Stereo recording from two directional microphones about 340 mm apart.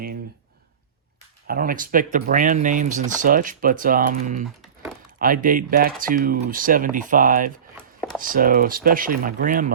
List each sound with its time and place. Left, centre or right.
1.5 s speech: right